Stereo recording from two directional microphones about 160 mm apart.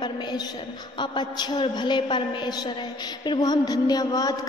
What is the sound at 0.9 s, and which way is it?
A woman's voice, 30° left (ahead or behind).